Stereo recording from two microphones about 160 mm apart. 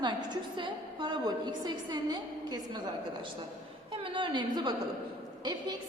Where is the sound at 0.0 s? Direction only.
30° right (ahead or behind).